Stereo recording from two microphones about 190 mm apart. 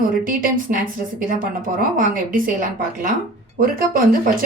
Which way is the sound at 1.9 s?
45° right (ahead or behind).